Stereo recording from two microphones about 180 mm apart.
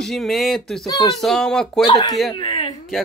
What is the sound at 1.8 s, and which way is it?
Speech, 20° left (ahead or behind).